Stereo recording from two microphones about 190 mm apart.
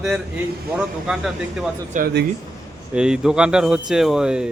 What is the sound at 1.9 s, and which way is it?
Speech, 55° right (ahead or behind).